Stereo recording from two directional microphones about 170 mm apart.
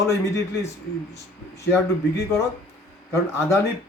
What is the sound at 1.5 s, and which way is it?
A man's voice, 15° left (ahead or behind).